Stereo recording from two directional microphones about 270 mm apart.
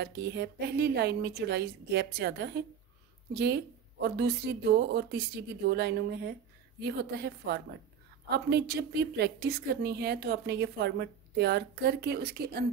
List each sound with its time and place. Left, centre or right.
0.0 s a woman's voice: right
4.0 s a woman's voice: right